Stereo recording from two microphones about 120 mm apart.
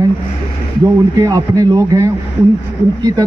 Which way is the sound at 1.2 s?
30° right (ahead or behind).